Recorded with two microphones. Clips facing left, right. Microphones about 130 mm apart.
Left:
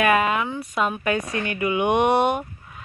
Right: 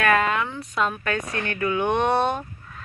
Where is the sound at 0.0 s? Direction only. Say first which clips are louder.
Left 1 dB; 10° left (ahead or behind).